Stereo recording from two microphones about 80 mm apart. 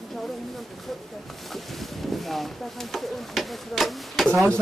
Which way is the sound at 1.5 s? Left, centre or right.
Centre.